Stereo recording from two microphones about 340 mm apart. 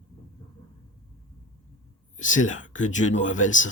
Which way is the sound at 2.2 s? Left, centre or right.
Left.